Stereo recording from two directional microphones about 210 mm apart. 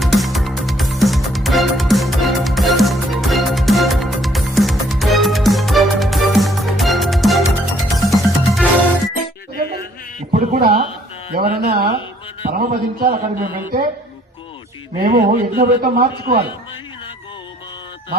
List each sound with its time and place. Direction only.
0.0 s music: centre (ahead or behind)
10.3 s a sound: 40° right (ahead or behind)
11.4 s speech: 30° right (ahead or behind)
11.7 s a man's voice: 45° right (ahead or behind)
14.9 s a man's voice: 50° right (ahead or behind)